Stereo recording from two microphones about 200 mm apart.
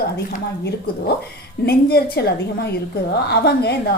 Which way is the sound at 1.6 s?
50° left (ahead or behind).